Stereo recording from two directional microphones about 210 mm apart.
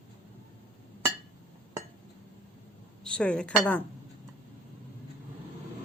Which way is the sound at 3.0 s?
5° left (ahead or behind).